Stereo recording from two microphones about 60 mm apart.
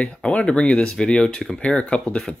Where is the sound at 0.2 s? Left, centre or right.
Centre.